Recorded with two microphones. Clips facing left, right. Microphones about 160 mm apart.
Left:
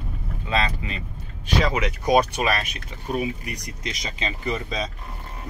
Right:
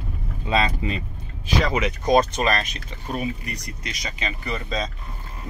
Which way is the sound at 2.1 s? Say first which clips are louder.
Right 1 dB; 10° left (ahead or behind).